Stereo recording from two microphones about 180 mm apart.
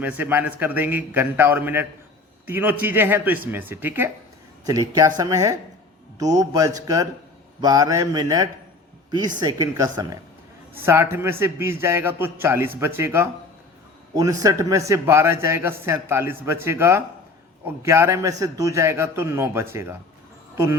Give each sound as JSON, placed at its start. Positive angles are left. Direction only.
{"t": 0.0, "sound": "a man's voice", "side_deg": -10}